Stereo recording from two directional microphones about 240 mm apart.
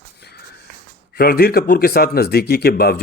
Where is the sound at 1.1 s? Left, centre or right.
Left.